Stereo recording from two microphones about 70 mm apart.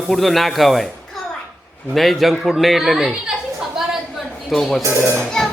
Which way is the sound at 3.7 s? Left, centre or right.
Centre.